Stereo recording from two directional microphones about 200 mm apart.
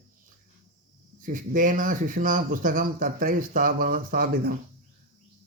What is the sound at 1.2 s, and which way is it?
Speech, 40° right (ahead or behind).